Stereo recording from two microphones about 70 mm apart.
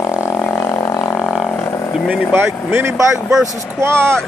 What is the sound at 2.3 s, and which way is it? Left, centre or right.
Speech, right.